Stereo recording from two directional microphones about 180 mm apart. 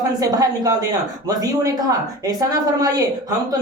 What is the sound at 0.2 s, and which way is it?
A woman's voice, 20° right (ahead or behind).